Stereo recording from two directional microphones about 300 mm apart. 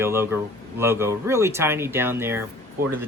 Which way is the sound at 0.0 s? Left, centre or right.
Centre.